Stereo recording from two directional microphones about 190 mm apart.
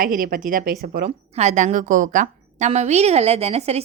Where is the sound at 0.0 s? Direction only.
45° right (ahead or behind).